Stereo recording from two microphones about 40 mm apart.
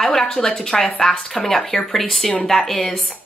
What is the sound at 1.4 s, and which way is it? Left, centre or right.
Speech, centre.